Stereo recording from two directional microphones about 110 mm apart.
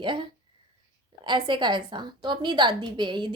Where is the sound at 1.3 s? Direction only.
45° right (ahead or behind).